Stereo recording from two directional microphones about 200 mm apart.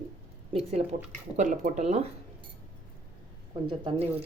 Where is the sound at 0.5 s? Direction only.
30° right (ahead or behind).